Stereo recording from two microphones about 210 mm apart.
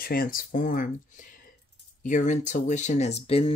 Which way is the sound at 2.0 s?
35° left (ahead or behind).